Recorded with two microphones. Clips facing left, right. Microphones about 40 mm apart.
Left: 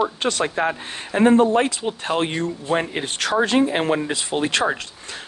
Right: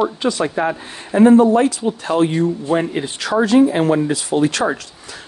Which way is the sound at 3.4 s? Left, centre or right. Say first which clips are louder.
Right 6 dB; left.